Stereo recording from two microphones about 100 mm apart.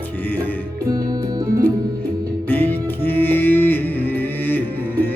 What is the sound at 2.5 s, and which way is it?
Music, 20° left (ahead or behind).